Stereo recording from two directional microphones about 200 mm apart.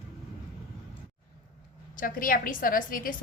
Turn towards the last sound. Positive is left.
turn(degrees=45)  # may be behind; listen again after turning